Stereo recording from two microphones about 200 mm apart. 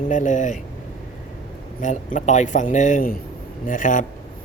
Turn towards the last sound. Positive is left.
turn(degrees=40)  # may be behind; listen again after turning